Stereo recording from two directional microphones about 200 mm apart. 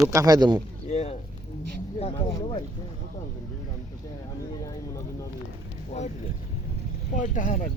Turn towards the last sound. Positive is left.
turn(degrees=40)  # may be behind; listen again after turning